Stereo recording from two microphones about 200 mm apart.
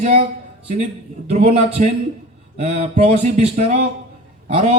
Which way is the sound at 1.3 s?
30° right (ahead or behind).